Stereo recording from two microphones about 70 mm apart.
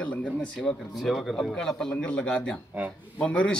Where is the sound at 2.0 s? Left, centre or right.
Centre.